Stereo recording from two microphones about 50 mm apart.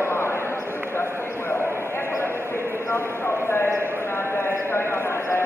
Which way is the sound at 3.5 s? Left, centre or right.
Left.